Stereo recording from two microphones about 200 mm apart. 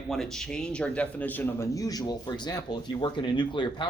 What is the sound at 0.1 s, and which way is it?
A man's voice, centre (ahead or behind).